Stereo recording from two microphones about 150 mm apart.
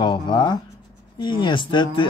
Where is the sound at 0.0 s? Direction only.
30° left (ahead or behind).